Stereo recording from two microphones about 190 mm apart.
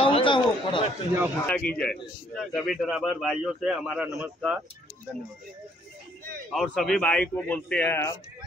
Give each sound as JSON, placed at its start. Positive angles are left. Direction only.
{"t": 0.0, "sound": "chatter", "side_deg": 30}
{"t": 1.4, "sound": "a man's voice", "side_deg": 5}
{"t": 6.5, "sound": "a man's voice", "side_deg": 0}